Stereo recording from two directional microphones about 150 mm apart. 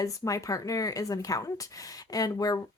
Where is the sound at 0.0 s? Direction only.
20° left (ahead or behind).